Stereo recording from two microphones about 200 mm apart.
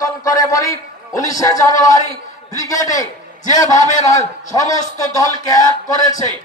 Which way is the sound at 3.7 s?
35° left (ahead or behind).